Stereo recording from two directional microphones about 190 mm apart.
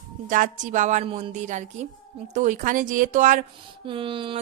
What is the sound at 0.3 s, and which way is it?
Speech, 45° right (ahead or behind).